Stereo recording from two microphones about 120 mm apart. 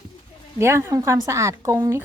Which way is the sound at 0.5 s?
20° right (ahead or behind).